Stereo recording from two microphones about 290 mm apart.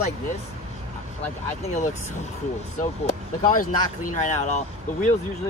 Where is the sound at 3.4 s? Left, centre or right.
Left.